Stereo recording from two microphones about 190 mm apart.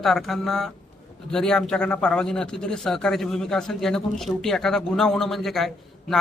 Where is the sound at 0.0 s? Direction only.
Centre (ahead or behind).